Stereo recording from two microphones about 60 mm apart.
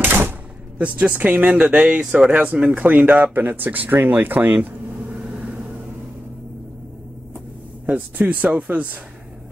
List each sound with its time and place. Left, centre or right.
0.0 s door: right
0.7 s speech: right
7.8 s speech: right